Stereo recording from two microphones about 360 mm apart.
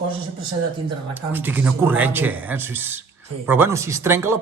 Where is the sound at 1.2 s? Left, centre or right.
Centre.